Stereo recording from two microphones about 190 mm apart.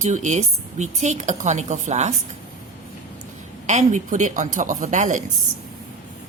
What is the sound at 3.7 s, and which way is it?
A woman's voice, 40° right (ahead or behind).